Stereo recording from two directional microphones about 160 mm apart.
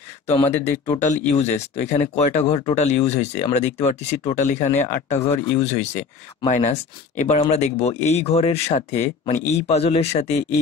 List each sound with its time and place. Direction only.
0.3 s speech: 40° left (ahead or behind)